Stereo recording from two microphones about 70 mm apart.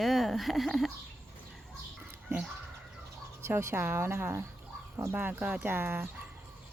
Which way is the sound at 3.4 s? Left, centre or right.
Right.